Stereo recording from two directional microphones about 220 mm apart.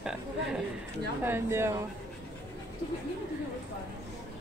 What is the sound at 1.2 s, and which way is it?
Speech, 10° right (ahead or behind).